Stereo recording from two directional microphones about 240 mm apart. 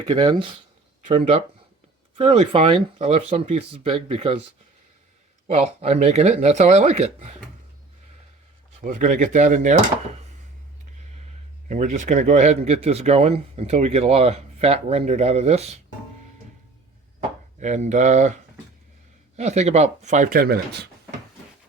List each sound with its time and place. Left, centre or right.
0.0 s speech: centre
5.5 s speech: right
8.8 s speech: right
11.7 s speech: right
17.6 s speech: right
19.4 s speech: right